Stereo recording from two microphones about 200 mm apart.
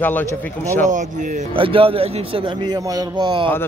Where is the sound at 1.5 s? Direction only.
25° right (ahead or behind).